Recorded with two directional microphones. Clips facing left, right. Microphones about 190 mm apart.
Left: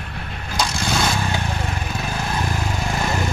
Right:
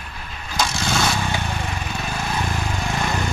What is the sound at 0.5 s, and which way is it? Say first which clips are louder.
Vehicle: even; centre (ahead or behind).